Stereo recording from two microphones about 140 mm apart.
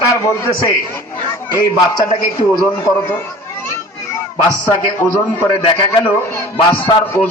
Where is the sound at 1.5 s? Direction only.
25° left (ahead or behind).